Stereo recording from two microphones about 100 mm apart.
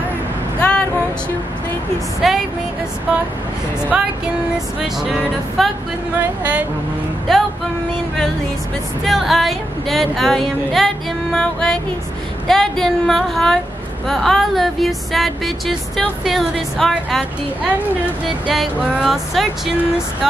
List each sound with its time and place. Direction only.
0.6 s a sound: 10° left (ahead or behind)
2.2 s music: centre (ahead or behind)
3.9 s music: 10° right (ahead or behind)
5.6 s music: centre (ahead or behind)
7.3 s music: centre (ahead or behind)
9.0 s music: centre (ahead or behind)
18.5 s music: centre (ahead or behind)